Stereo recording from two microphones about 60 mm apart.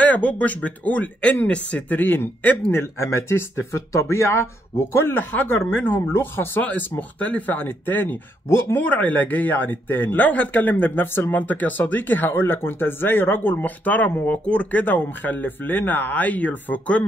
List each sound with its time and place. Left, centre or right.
0.0 s speech: left
2.0 s a man's voice: left
5.3 s speech: left
6.6 s speech: left
8.5 s a man's voice: left
8.8 s speech: left
11.1 s speech: left
11.4 s speech: left